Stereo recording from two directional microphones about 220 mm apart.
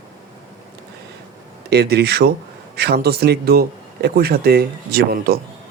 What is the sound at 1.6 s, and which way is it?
Speech, 50° right (ahead or behind).